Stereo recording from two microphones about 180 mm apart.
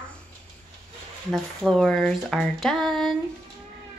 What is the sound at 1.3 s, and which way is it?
Speech, centre (ahead or behind).